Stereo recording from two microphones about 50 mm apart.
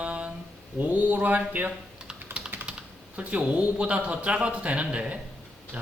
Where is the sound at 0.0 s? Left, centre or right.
Right.